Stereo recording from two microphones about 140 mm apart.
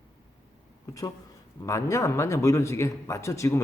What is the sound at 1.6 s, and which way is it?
Speech, 20° left (ahead or behind).